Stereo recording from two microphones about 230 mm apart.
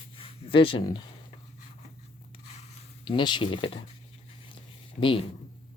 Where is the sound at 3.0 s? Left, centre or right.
Centre.